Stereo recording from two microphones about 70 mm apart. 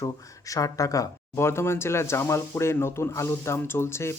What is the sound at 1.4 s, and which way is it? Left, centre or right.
Speech, left.